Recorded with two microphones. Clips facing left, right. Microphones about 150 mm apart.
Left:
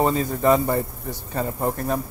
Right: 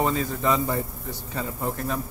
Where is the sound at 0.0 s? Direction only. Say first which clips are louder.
Left 4 dB; 40° left (ahead or behind).